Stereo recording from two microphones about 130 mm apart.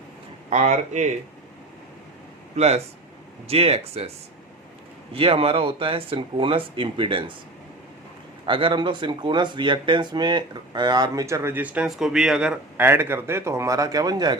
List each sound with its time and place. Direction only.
0.5 s speech: 65° right (ahead or behind)
2.6 s speech: 55° right (ahead or behind)
5.1 s speech: 45° right (ahead or behind)
8.4 s speech: 40° right (ahead or behind); by 12.5 s 5° right (ahead or behind)
12.7 s a man's voice: 15° right (ahead or behind)